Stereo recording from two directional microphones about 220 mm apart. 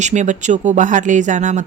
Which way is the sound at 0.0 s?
35° right (ahead or behind).